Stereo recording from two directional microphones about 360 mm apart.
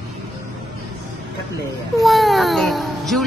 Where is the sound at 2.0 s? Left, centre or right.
Centre.